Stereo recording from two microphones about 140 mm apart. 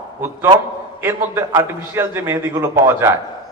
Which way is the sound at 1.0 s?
15° right (ahead or behind).